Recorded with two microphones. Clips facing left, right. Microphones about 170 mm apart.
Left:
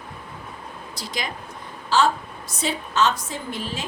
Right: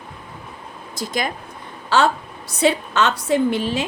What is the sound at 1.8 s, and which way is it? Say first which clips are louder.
A woman's voice: right 2 dB; 65° right (ahead or behind).